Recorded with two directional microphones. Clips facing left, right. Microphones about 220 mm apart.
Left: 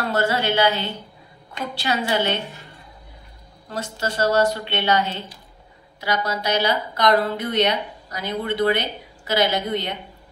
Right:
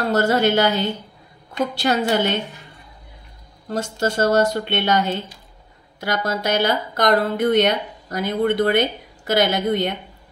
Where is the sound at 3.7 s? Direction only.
50° right (ahead or behind).